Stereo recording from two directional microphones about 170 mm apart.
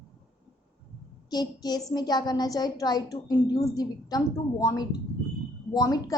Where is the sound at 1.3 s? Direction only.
25° left (ahead or behind).